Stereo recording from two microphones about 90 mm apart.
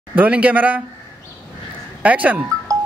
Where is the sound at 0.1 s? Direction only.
15° right (ahead or behind).